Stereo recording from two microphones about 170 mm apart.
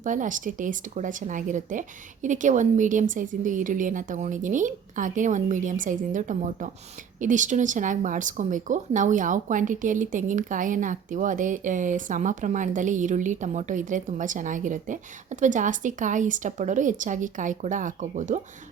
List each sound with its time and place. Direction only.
0.0 s speech: 50° right (ahead or behind)